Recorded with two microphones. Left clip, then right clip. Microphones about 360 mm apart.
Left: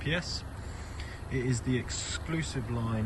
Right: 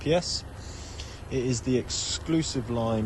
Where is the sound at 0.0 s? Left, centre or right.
Centre.